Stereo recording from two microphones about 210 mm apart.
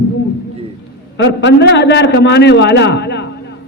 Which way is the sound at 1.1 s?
60° left (ahead or behind).